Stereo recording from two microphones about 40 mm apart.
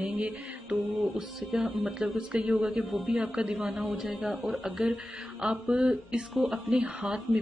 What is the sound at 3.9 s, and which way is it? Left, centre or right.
Speech, centre.